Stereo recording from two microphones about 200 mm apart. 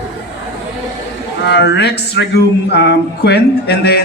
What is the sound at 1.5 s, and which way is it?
A man's voice, 60° left (ahead or behind).